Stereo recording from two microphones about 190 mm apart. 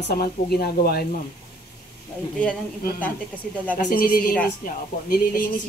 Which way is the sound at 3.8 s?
50° left (ahead or behind).